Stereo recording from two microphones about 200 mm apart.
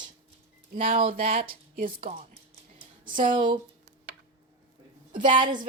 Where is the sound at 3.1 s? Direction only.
40° right (ahead or behind).